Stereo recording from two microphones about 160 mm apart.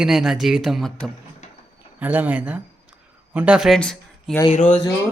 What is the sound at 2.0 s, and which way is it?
Speech, 10° right (ahead or behind).